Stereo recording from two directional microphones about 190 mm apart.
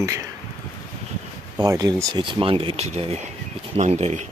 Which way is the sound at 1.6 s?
20° right (ahead or behind).